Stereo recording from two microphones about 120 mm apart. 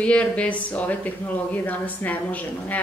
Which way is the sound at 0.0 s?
10° left (ahead or behind).